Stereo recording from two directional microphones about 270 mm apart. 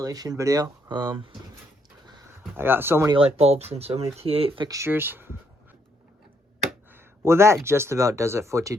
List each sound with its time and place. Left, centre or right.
0.0 s speech: centre
2.4 s speech: centre
6.7 s a sound: centre
7.5 s speech: centre